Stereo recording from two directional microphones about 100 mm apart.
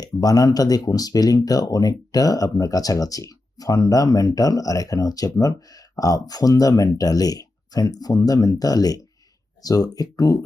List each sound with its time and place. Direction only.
0.0 s speech: 40° left (ahead or behind)